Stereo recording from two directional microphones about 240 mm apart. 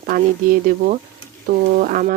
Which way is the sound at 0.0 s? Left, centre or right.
Right.